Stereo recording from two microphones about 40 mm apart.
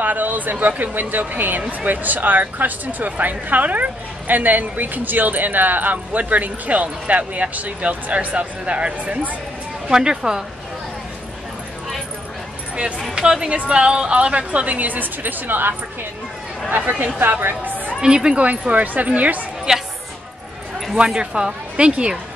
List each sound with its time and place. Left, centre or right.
0.0 s speech: right
1.6 s a woman's voice: right
1.9 s speech: right
9.8 s speech: centre
13.1 s speech: centre
13.5 s a woman's voice: right
16.7 s speech: right
17.2 s a woman's voice: right
18.0 s speech: centre
18.4 s a woman's voice: right
19.7 s speech: centre
20.9 s speech: right